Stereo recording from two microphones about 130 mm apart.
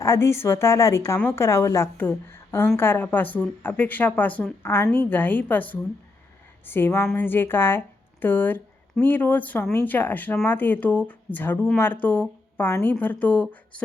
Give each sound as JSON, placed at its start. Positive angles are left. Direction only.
{"t": 0.0, "sound": "a woman's voice", "side_deg": 20}